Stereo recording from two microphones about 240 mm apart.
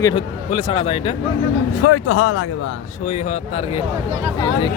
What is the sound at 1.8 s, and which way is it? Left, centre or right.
Speech, left.